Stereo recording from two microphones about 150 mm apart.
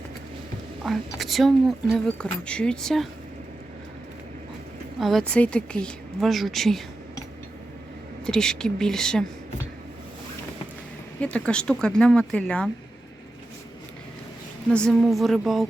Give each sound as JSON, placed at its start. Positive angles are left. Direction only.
{"t": 0.9, "sound": "speech", "side_deg": 0}
{"t": 4.9, "sound": "speech", "side_deg": 0}
{"t": 8.3, "sound": "speech", "side_deg": 5}
{"t": 11.2, "sound": "speech", "side_deg": 10}
{"t": 14.7, "sound": "speech", "side_deg": 5}